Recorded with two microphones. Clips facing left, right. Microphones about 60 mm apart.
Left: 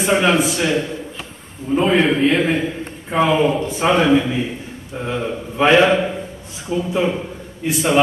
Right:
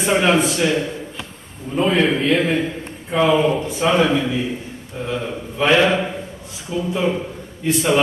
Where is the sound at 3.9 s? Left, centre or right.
Centre.